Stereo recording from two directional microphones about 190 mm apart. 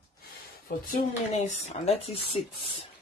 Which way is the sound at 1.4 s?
35° left (ahead or behind).